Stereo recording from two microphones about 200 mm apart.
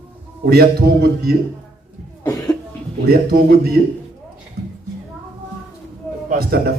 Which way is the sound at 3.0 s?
50° right (ahead or behind).